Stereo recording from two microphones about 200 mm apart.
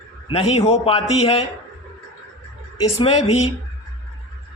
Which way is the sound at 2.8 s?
30° left (ahead or behind).